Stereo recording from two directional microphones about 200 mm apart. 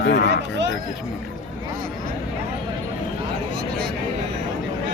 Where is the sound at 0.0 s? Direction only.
60° left (ahead or behind).